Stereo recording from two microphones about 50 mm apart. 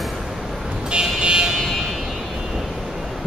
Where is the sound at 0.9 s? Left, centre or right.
Centre.